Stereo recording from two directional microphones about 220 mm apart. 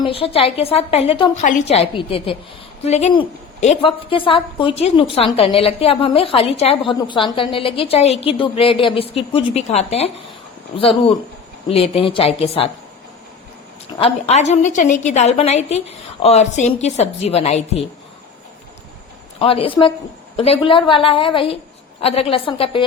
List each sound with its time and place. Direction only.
0.0 s a woman's voice: 25° left (ahead or behind)
14.0 s a woman's voice: 30° left (ahead or behind)
19.4 s a woman's voice: 25° left (ahead or behind)